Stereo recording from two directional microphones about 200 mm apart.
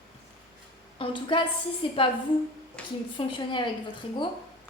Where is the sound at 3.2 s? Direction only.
25° left (ahead or behind).